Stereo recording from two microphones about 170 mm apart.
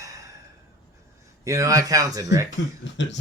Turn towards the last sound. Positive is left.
turn(degrees=90)